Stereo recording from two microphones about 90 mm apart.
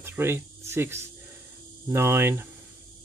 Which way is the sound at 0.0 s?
25° right (ahead or behind).